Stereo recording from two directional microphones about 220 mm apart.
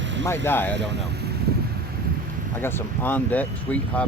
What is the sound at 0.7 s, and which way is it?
Vehicle, 50° right (ahead or behind).